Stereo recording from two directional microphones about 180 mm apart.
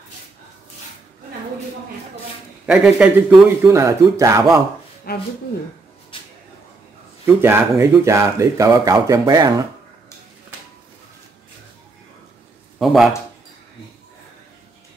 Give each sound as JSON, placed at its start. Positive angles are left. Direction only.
{"t": 2.6, "sound": "a man's voice", "side_deg": -5}
{"t": 3.6, "sound": "speech", "side_deg": -15}
{"t": 5.1, "sound": "speech", "side_deg": 60}
{"t": 6.1, "sound": "a sound", "side_deg": 30}
{"t": 7.2, "sound": "speech", "side_deg": -10}
{"t": 12.7, "sound": "a man's voice", "side_deg": 0}